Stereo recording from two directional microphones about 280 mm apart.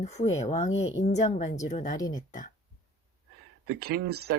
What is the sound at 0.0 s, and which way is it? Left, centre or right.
A woman's voice, left.